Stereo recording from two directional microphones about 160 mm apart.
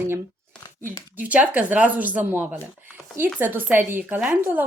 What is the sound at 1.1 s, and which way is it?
A woman's voice, 10° right (ahead or behind).